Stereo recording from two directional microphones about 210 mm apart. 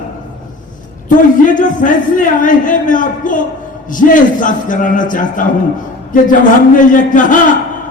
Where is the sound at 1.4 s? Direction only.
40° left (ahead or behind).